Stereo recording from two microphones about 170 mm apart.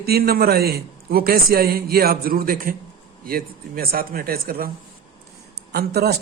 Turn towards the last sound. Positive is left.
turn(degrees=-70)  # may be behind; listen again after turning